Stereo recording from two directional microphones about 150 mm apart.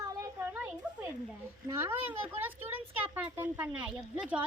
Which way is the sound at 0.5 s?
15° right (ahead or behind).